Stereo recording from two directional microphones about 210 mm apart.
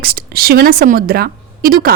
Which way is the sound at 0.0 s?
45° right (ahead or behind).